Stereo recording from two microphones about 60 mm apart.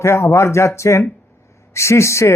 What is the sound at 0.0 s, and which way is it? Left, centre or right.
Speech, left.